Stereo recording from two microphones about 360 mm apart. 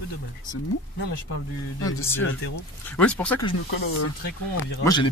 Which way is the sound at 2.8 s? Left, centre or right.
Centre.